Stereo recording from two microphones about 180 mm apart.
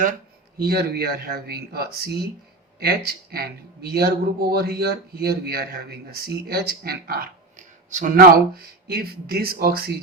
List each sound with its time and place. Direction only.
0.6 s speech: 55° right (ahead or behind)
7.9 s speech: 45° right (ahead or behind)